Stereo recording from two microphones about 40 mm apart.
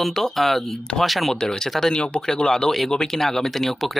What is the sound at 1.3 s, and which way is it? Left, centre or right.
Speech, centre.